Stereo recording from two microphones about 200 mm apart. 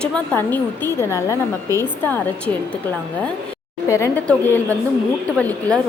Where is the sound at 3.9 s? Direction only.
15° left (ahead or behind).